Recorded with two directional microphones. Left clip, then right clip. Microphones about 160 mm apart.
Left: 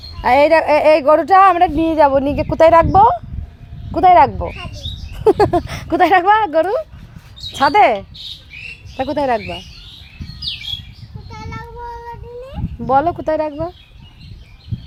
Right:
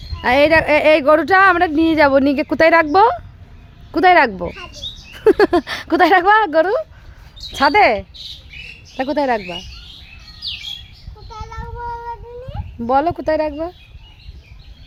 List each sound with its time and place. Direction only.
0.2 s a woman's voice: 20° right (ahead or behind); by 4.3 s 40° right (ahead or behind)
5.3 s speech: 35° right (ahead or behind); by 9.6 s 10° right (ahead or behind)
11.3 s child singing: centre (ahead or behind)
12.8 s speech: 10° right (ahead or behind)